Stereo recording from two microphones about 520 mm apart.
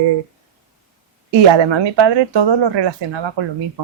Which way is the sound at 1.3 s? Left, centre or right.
Right.